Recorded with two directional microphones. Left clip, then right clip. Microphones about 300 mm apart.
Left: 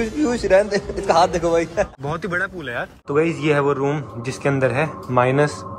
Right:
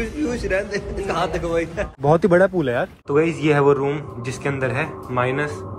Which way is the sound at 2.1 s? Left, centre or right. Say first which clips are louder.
Right 9 dB; centre.